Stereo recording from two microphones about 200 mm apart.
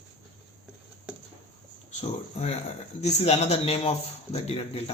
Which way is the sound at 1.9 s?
35° left (ahead or behind).